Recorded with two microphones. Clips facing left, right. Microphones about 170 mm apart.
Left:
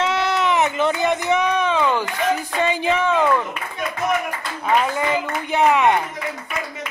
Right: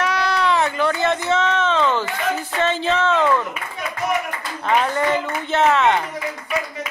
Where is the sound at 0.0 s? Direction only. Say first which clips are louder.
Even; 25° left (ahead or behind).